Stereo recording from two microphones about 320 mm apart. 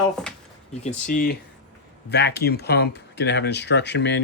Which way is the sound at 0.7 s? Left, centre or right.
Left.